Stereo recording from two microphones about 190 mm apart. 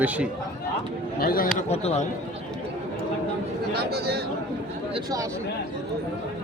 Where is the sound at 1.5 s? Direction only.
35° left (ahead or behind).